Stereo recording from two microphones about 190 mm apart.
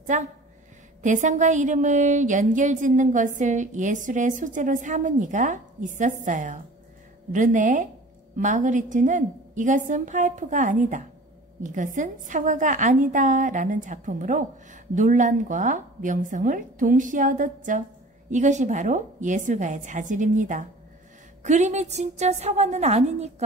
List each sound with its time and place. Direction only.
0.0 s a woman's voice: 40° right (ahead or behind)